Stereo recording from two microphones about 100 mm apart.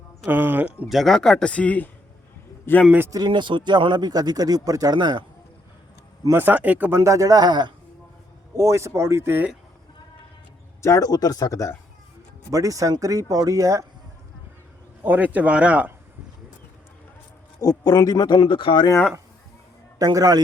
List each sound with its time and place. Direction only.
0.3 s speech: 20° right (ahead or behind)
0.9 s a man's voice: centre (ahead or behind); by 2.8 s 25° left (ahead or behind)
3.2 s speech: 55° right (ahead or behind)
6.3 s speech: 20° right (ahead or behind)
7.0 s speech: 35° right (ahead or behind)
8.5 s speech: 30° right (ahead or behind)
10.8 s speech: 30° left (ahead or behind)
12.5 s speech: 35° right (ahead or behind)
15.0 s speech: 15° right (ahead or behind)
17.6 s speech: 40° left (ahead or behind); by 18.9 s 55° left (ahead or behind)
20.0 s speech: 40° right (ahead or behind)